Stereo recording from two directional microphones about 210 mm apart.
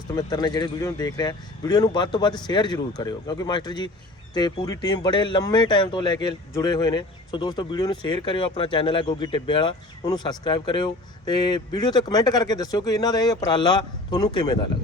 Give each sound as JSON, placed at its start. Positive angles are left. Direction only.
{"t": 0.2, "sound": "speech", "side_deg": 20}